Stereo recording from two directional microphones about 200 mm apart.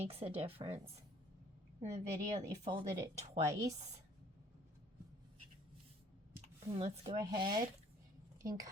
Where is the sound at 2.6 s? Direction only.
30° right (ahead or behind).